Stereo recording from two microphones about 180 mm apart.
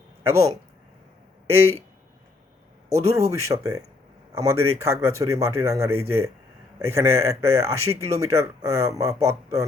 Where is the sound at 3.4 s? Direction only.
15° right (ahead or behind).